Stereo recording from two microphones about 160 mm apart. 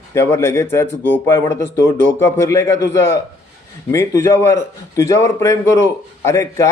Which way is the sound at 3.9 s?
20° left (ahead or behind).